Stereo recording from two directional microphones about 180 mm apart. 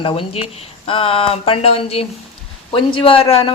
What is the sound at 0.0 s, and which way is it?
A woman's voice, 30° left (ahead or behind).